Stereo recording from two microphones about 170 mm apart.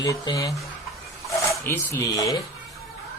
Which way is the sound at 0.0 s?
20° left (ahead or behind).